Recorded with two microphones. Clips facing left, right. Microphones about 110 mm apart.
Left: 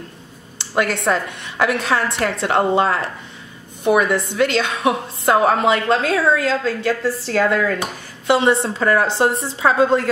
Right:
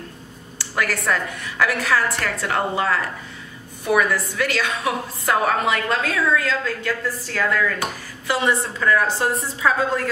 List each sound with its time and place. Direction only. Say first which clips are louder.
0.6 s a woman's voice: left 5 dB; 25° left (ahead or behind)